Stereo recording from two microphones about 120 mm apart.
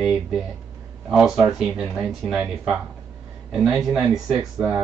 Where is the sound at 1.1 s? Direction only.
5° right (ahead or behind).